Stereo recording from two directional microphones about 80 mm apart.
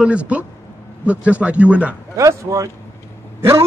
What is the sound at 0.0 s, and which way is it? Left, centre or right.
Speech, centre.